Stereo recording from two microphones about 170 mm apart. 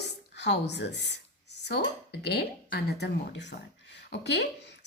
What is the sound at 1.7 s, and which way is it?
A woman's voice, 75° left (ahead or behind).